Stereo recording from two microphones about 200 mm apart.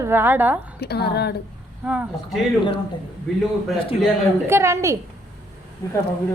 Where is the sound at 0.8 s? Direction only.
55° left (ahead or behind).